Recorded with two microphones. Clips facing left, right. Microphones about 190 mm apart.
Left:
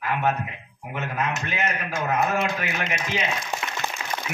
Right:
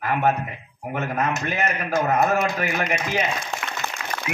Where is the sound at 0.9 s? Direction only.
45° right (ahead or behind).